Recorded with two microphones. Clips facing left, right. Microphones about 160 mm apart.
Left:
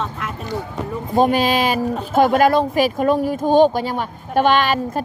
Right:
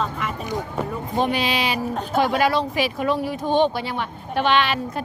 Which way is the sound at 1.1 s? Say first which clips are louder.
Left 7 dB; 45° left (ahead or behind).